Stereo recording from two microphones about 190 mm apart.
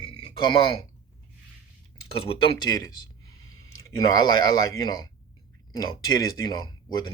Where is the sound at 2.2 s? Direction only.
25° left (ahead or behind).